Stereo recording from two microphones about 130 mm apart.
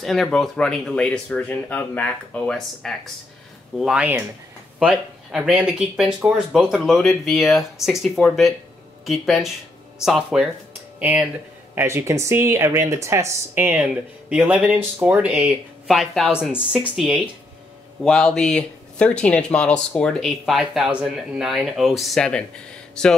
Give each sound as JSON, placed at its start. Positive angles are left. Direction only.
{"t": 0.0, "sound": "speech", "side_deg": 0}
{"t": 3.8, "sound": "speech", "side_deg": -5}